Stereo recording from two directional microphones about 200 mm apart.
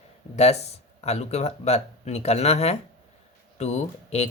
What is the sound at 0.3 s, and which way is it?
Speech, 30° left (ahead or behind).